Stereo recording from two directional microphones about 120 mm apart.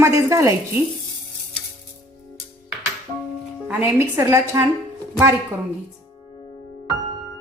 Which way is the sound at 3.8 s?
20° right (ahead or behind).